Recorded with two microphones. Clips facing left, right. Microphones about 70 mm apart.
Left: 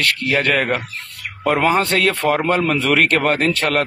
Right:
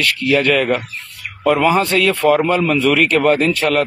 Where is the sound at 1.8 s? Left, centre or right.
Left.